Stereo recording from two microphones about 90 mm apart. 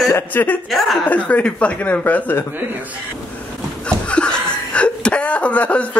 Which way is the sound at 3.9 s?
10° left (ahead or behind).